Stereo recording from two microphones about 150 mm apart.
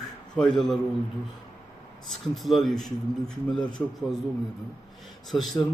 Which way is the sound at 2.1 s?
Centre (ahead or behind).